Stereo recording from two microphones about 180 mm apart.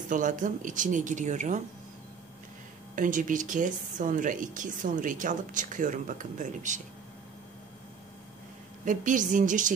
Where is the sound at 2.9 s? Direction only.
45° right (ahead or behind).